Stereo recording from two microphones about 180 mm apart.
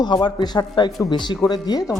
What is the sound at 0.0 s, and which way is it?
Speech, 25° left (ahead or behind).